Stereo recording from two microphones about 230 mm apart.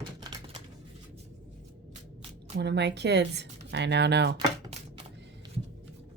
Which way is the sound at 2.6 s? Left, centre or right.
Right.